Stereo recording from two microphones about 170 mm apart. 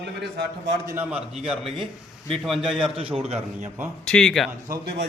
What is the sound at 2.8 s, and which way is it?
Speech, 30° right (ahead or behind).